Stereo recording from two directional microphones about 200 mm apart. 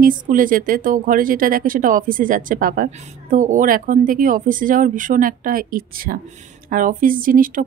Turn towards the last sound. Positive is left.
turn(degrees=-45)  # may be behind; listen again after turning